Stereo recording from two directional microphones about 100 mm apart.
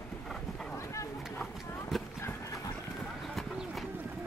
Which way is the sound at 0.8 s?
30° left (ahead or behind).